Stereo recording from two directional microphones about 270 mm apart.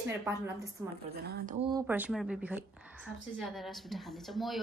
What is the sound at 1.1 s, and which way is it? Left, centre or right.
Speech, right.